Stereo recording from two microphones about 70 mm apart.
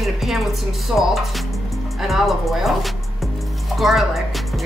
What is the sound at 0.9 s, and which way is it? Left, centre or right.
Speech, right.